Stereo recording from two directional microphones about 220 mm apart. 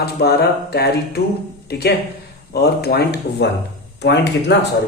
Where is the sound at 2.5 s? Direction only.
45° left (ahead or behind).